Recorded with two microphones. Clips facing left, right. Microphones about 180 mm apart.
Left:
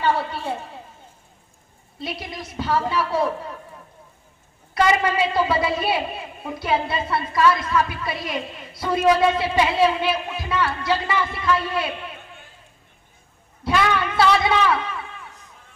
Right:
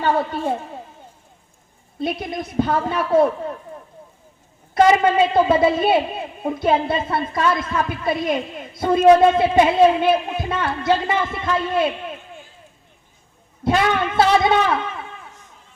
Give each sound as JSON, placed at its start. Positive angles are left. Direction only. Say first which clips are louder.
{"t": 0.0, "sound": "a woman's voice", "louder": "right 3 dB", "side_deg": -45}
{"t": 2.0, "sound": "a woman's voice", "louder": "right 7 dB", "side_deg": -50}
{"t": 4.7, "sound": "a woman's voice", "louder": "right 5 dB", "side_deg": -50}
{"t": 13.7, "sound": "a woman's voice", "louder": "right 3 dB", "side_deg": -50}